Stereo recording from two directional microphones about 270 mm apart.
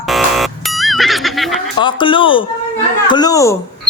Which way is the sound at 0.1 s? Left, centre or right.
Centre.